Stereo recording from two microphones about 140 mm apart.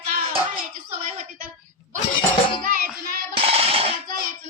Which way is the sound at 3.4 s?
45° right (ahead or behind).